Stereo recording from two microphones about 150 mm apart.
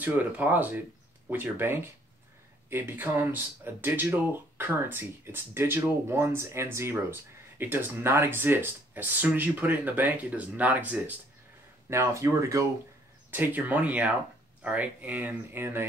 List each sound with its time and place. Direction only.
0.0 s speech: 10° right (ahead or behind)